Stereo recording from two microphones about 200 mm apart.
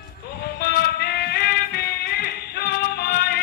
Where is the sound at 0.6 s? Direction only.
50° left (ahead or behind).